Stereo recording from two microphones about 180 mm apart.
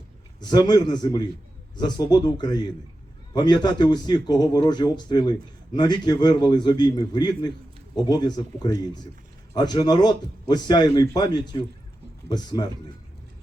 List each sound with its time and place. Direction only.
0.3 s speech: 20° left (ahead or behind)